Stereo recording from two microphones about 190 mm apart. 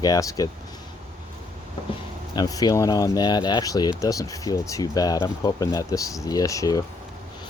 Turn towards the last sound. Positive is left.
turn(degrees=15)  # may be behind; listen again after turning